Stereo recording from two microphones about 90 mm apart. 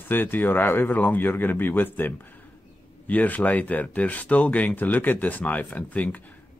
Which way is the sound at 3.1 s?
20° left (ahead or behind).